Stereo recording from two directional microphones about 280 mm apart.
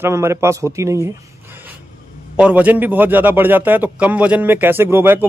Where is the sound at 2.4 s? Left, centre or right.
Centre.